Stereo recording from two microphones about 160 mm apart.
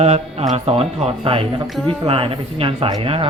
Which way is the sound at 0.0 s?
40° right (ahead or behind).